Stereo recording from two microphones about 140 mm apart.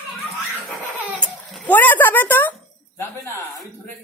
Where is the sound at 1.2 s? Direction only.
10° left (ahead or behind).